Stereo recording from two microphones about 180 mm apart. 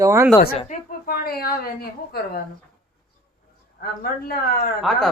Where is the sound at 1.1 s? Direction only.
55° left (ahead or behind).